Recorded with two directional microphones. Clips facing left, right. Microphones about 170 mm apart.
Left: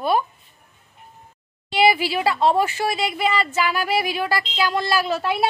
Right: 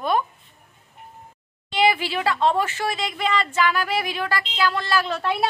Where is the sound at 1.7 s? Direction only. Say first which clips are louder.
Left 3 dB; 10° left (ahead or behind).